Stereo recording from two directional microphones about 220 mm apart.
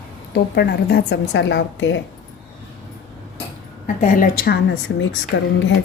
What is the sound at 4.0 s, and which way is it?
A woman's voice, 35° left (ahead or behind).